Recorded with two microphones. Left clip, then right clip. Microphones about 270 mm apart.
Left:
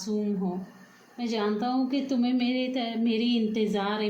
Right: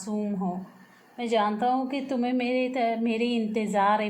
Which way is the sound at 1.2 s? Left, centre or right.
Right.